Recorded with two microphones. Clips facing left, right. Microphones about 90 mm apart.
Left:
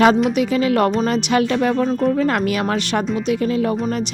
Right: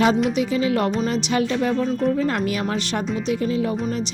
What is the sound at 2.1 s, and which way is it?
A woman's voice, 80° left.